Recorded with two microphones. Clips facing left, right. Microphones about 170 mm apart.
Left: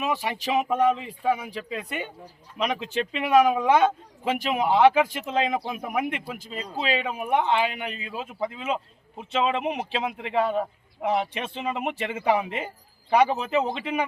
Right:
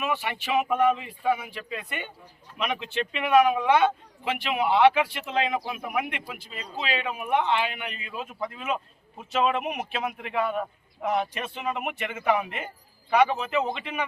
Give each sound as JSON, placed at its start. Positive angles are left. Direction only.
{"t": 0.0, "sound": "speech", "side_deg": 35}
{"t": 5.7, "sound": "speech", "side_deg": 35}